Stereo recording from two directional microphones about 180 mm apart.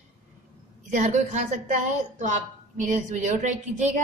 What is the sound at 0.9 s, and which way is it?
A woman's voice, 40° right (ahead or behind).